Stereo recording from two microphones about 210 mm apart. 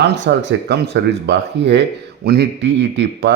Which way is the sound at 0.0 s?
55° right (ahead or behind).